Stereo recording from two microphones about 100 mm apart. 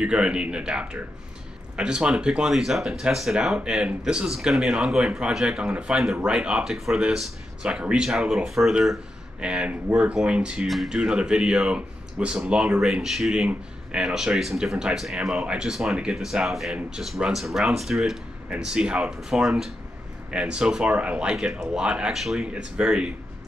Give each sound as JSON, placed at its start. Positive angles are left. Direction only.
{"t": 0.0, "sound": "speech", "side_deg": -10}